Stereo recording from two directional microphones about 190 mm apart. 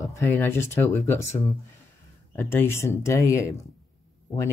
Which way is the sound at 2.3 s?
10° left (ahead or behind).